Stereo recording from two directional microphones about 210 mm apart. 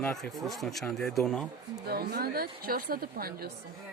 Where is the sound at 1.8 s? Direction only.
45° right (ahead or behind).